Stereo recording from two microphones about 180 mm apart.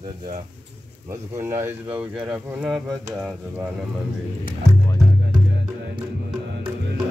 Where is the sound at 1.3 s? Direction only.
15° right (ahead or behind).